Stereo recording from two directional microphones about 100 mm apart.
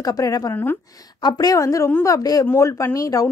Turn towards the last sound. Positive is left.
turn(degrees=35)  # may be behind; listen again after turning